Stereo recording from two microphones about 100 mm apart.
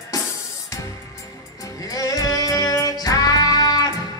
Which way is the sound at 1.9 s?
35° left (ahead or behind).